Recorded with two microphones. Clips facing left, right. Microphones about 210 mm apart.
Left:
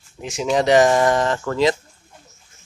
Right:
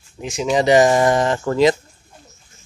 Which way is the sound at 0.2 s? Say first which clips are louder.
Right 1 dB; centre (ahead or behind).